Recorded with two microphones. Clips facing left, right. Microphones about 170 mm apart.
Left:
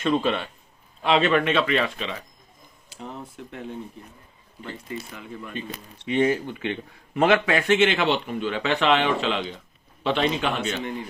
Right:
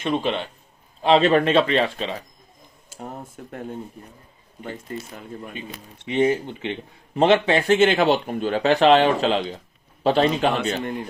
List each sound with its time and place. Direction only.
0.0 s speech: 20° right (ahead or behind)
1.0 s speech: 35° right (ahead or behind)
2.9 s speech: 50° right (ahead or behind)
6.1 s speech: 20° right (ahead or behind); by 10.5 s 40° right (ahead or behind)